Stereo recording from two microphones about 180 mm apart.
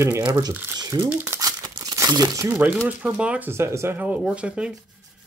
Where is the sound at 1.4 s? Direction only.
20° right (ahead or behind).